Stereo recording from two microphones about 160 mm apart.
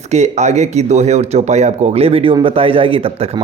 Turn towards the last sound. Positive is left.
turn(degrees=-35)  # may be behind; listen again after turning